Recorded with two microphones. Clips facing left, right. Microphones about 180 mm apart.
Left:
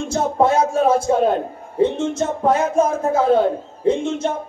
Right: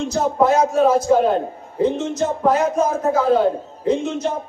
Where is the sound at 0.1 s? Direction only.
30° left (ahead or behind).